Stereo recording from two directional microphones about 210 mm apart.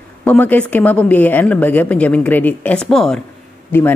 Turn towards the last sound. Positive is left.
turn(degrees=10)  # may be behind; listen again after turning